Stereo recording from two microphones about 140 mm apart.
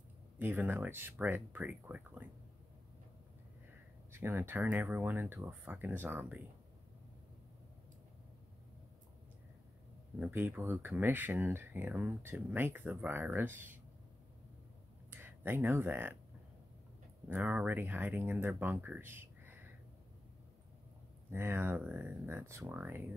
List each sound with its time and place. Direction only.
0.4 s speech: 15° right (ahead or behind)
4.1 s speech: 15° right (ahead or behind)
10.1 s speech: 10° right (ahead or behind)
15.0 s speech: 15° right (ahead or behind)
17.3 s speech: 10° right (ahead or behind)
21.3 s speech: 15° right (ahead or behind)